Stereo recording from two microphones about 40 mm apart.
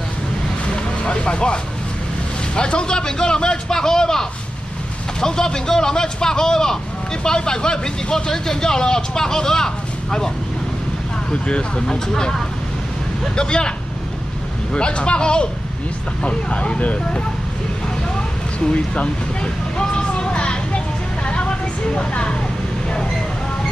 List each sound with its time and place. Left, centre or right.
1.0 s a man's voice: left
11.4 s a man's voice: left
12.1 s a man's voice: centre; by 17.2 s left
18.7 s speech: left
19.8 s vehicle: left